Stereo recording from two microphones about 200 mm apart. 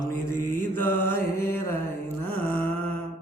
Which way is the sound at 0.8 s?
10° left (ahead or behind).